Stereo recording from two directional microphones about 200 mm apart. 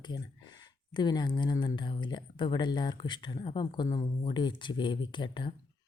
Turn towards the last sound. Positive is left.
turn(degrees=25)  # may be behind; listen again after turning